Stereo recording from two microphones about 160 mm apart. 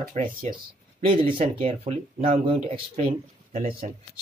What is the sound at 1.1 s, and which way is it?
Speech, 35° right (ahead or behind).